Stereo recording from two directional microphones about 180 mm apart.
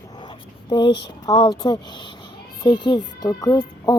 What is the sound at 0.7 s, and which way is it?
Speech, 25° left (ahead or behind).